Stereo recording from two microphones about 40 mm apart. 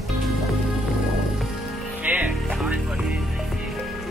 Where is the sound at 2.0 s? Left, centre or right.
Right.